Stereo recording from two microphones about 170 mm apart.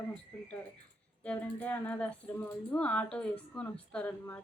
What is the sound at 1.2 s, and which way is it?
Speech, 10° left (ahead or behind).